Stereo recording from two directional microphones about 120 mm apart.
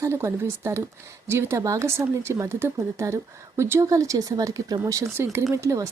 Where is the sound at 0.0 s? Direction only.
25° right (ahead or behind).